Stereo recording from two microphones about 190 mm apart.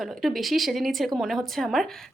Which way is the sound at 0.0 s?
Centre (ahead or behind).